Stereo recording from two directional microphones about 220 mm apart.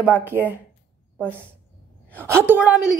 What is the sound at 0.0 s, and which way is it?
Speech, 10° right (ahead or behind).